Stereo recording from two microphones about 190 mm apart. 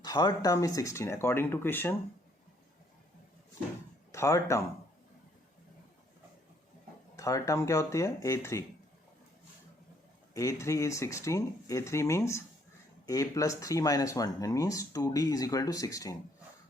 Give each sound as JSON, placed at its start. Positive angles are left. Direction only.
{"t": 0.0, "sound": "speech", "side_deg": 20}
{"t": 4.1, "sound": "speech", "side_deg": 15}
{"t": 7.2, "sound": "speech", "side_deg": 15}
{"t": 10.3, "sound": "speech", "side_deg": 15}